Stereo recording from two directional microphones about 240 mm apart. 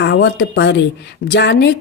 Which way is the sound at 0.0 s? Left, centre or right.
Left.